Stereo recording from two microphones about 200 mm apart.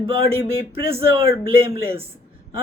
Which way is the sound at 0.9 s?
30° right (ahead or behind).